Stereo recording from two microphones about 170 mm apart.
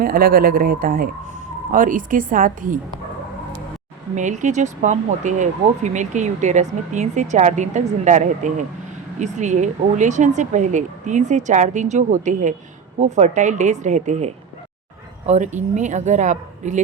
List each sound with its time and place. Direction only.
0.0 s speech: 60° right (ahead or behind)
4.1 s speech: 45° right (ahead or behind)